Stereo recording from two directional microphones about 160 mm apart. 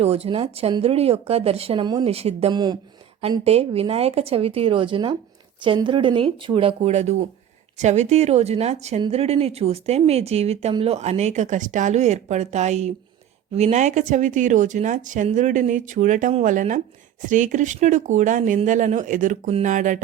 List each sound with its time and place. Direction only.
0.0 s speech: 40° right (ahead or behind)